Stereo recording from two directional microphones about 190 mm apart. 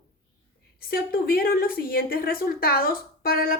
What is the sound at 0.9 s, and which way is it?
A woman's voice, 50° left (ahead or behind).